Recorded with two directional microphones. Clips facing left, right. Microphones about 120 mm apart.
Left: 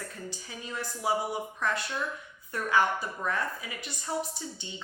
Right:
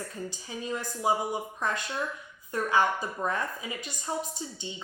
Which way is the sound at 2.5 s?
20° right (ahead or behind).